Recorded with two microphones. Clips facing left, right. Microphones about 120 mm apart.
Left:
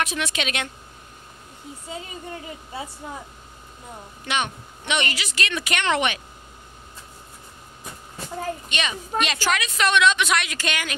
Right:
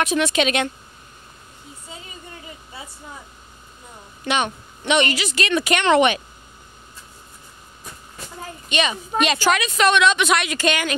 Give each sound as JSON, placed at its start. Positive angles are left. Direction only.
{"t": 0.0, "sound": "a woman's voice", "side_deg": -30}
{"t": 4.3, "sound": "a woman's voice", "side_deg": -25}
{"t": 8.6, "sound": "a woman's voice", "side_deg": -20}
{"t": 10.6, "sound": "speech", "side_deg": -30}